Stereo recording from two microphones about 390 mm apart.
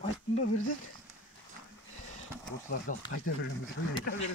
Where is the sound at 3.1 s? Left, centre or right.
Left.